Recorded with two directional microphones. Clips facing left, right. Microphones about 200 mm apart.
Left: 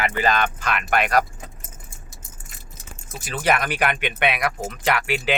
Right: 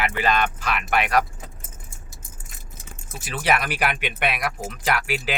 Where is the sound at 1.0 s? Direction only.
45° left (ahead or behind).